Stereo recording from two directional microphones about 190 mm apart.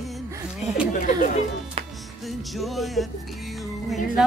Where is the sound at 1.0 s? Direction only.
40° left (ahead or behind).